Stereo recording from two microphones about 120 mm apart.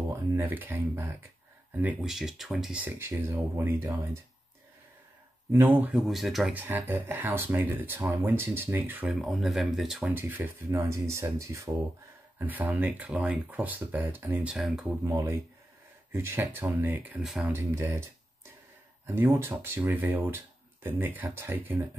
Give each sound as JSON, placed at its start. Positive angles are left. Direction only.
{"t": 0.4, "sound": "speech", "side_deg": -20}
{"t": 2.0, "sound": "speech", "side_deg": 0}
{"t": 5.5, "sound": "speech", "side_deg": -20}
{"t": 6.0, "sound": "speech", "side_deg": 0}
{"t": 6.5, "sound": "speech", "side_deg": -15}
{"t": 9.2, "sound": "speech", "side_deg": 0}
{"t": 12.4, "sound": "speech", "side_deg": -15}
{"t": 15.0, "sound": "speech", "side_deg": -25}